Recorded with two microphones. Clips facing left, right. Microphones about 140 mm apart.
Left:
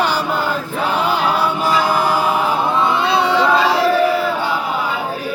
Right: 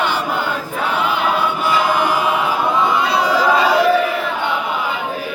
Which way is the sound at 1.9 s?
35° left (ahead or behind).